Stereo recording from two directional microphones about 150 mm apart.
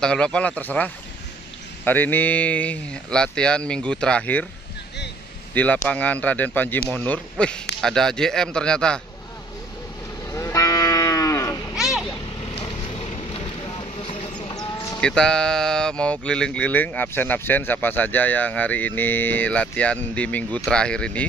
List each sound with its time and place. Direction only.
0.0 s speech: 5° left (ahead or behind)
5.5 s a man's voice: 10° left (ahead or behind)
10.3 s sheep: 20° left (ahead or behind)
12.4 s vehicle: 40° left (ahead or behind)
14.5 s fowl: 25° left (ahead or behind)
15.0 s speech: 5° left (ahead or behind)